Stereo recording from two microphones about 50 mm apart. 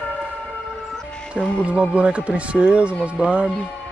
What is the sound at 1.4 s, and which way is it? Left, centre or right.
Speech, centre.